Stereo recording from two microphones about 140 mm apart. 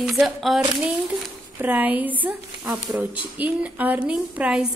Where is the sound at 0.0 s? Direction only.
5° right (ahead or behind).